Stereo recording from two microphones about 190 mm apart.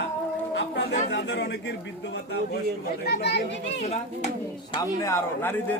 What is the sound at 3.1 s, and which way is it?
Speech, 60° left (ahead or behind).